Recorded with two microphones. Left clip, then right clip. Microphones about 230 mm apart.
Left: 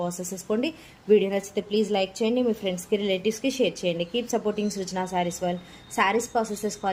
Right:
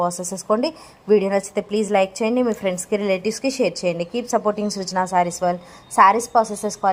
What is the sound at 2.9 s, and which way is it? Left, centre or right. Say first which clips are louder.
Speech: right 3 dB; right.